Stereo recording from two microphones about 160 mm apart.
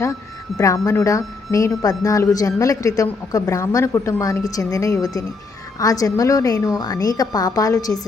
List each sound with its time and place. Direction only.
0.6 s a woman's voice: 20° left (ahead or behind)